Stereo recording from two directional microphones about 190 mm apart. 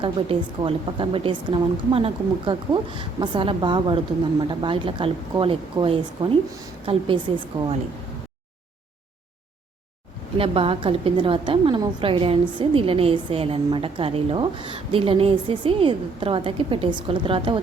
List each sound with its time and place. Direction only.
0.0 s a woman's voice: 30° right (ahead or behind)
10.3 s a woman's voice: 30° right (ahead or behind)